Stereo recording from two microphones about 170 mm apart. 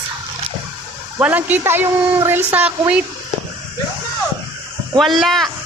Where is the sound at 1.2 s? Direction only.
10° right (ahead or behind).